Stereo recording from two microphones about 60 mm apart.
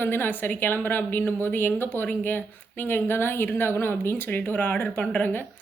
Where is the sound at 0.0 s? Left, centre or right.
Left.